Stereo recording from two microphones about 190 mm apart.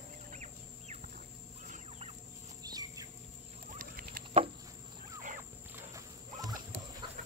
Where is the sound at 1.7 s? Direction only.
35° right (ahead or behind).